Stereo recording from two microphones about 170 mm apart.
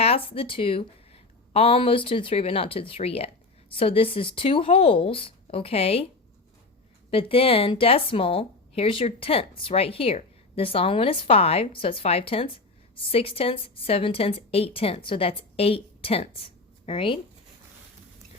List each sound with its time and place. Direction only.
0.0 s speech: 35° left (ahead or behind)
7.1 s speech: 35° left (ahead or behind)